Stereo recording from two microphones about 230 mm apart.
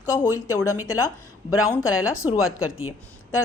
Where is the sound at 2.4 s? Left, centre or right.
Left.